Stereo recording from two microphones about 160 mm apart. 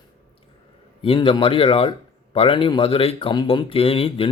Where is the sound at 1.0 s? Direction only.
35° left (ahead or behind).